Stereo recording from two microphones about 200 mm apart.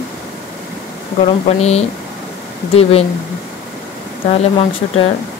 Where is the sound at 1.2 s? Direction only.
30° left (ahead or behind).